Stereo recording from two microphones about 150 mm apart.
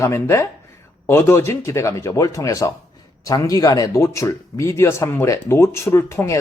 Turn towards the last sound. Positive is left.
turn(degrees=15)  # may be behind; listen again after turning